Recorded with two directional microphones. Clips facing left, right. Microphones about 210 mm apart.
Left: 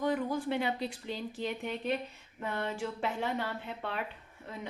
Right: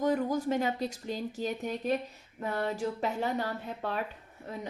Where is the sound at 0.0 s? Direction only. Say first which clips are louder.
Right 3 dB; 40° right (ahead or behind).